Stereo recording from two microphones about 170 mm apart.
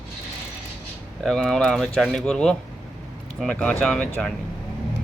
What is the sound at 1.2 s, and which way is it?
Speech, centre (ahead or behind).